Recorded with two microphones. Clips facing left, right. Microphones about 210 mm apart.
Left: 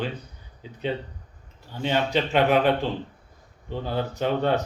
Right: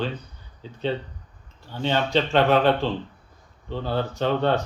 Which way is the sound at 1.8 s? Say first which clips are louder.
Right 1 dB; 10° left (ahead or behind).